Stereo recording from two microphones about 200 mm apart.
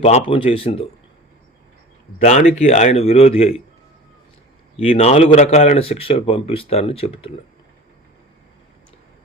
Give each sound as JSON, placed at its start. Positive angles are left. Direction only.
{"t": 0.0, "sound": "speech", "side_deg": 30}
{"t": 2.2, "sound": "speech", "side_deg": 35}
{"t": 4.8, "sound": "speech", "side_deg": 30}